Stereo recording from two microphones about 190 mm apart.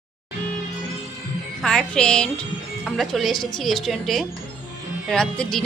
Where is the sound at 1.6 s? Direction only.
5° left (ahead or behind).